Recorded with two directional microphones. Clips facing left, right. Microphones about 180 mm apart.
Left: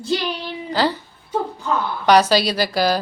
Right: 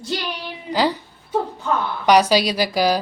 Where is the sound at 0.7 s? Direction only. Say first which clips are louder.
Even; 15° right (ahead or behind).